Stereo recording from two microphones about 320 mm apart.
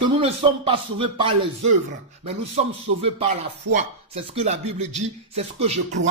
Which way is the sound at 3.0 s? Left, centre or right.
Right.